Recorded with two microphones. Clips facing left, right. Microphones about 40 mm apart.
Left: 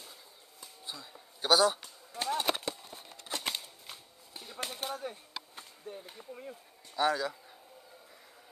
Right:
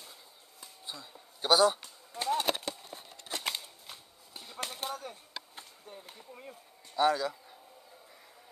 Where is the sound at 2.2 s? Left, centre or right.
Centre.